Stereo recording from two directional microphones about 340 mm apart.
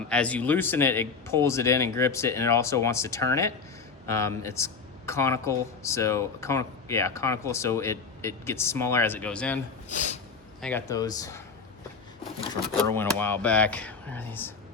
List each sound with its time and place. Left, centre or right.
0.1 s speech: centre
9.9 s a sound: left
10.6 s speech: centre